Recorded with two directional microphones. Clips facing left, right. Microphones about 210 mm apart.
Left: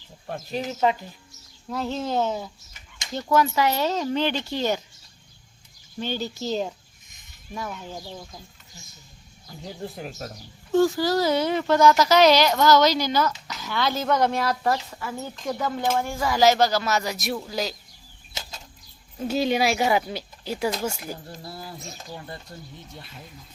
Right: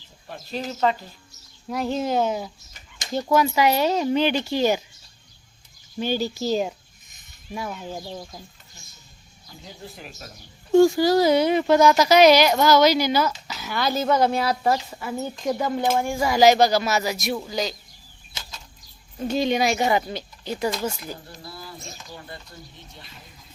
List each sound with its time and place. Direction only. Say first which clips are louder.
0.5 s speech: even; 15° left (ahead or behind)
1.7 s speech: right 3 dB; 10° right (ahead or behind)
6.0 s speech: right 4 dB; 10° right (ahead or behind)
9.8 s speech: left 7 dB; 50° left (ahead or behind)
10.7 s speech: right 5 dB; 15° right (ahead or behind); by 17.7 s 5° left (ahead or behind)
19.2 s speech: right 1 dB; 5° left (ahead or behind)
21.2 s speech: left 2 dB; 40° left (ahead or behind)